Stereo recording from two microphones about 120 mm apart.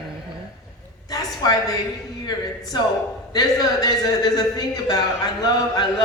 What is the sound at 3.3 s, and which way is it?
A man's voice, 35° left (ahead or behind).